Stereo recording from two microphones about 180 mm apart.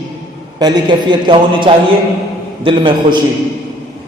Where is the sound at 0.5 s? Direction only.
25° right (ahead or behind).